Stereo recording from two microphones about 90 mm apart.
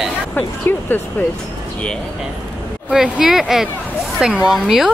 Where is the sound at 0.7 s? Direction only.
20° left (ahead or behind).